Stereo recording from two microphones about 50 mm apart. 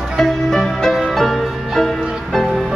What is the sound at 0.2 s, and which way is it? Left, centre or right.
Music, centre.